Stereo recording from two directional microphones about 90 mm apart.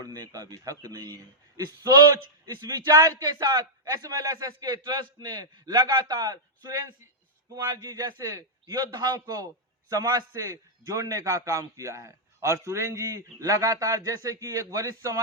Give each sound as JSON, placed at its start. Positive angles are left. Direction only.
{"t": 0.0, "sound": "a man's voice", "side_deg": -40}